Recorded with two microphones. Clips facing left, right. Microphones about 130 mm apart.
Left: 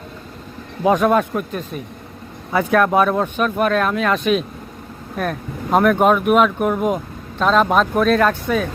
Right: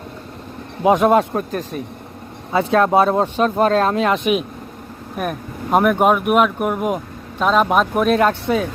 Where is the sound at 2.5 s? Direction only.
25° right (ahead or behind).